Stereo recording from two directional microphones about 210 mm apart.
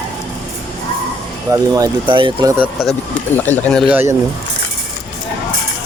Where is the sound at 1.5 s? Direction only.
15° right (ahead or behind).